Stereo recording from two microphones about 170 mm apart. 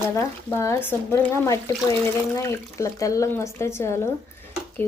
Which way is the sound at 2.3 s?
15° left (ahead or behind).